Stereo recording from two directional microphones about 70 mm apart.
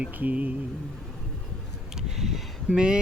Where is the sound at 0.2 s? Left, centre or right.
Right.